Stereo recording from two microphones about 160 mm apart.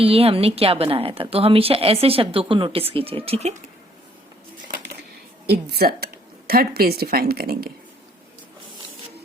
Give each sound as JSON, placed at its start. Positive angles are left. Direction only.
{"t": 0.0, "sound": "a woman's voice", "side_deg": -35}
{"t": 5.5, "sound": "a woman's voice", "side_deg": -85}